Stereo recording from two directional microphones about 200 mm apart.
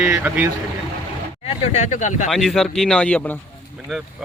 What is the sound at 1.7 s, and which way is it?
Speech, 40° left (ahead or behind).